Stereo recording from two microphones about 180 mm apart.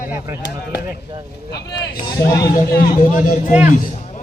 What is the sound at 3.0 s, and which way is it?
Speech, 45° left (ahead or behind).